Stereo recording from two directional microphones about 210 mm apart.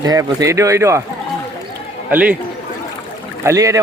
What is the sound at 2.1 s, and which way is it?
Speech, 5° right (ahead or behind).